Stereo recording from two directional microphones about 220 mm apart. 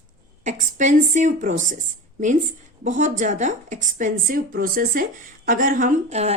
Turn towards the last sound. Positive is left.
turn(degrees=-30)  # may be behind; listen again after turning